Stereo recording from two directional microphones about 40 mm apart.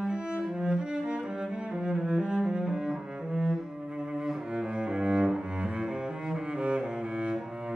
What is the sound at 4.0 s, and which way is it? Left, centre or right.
Cello, right.